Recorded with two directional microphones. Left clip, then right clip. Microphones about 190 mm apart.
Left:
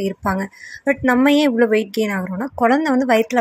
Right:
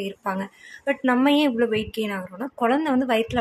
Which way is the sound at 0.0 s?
25° left (ahead or behind).